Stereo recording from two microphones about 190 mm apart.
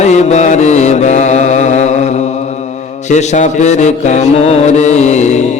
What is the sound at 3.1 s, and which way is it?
Music, 40° left (ahead or behind).